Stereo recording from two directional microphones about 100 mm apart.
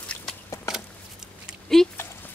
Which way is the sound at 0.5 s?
30° left (ahead or behind).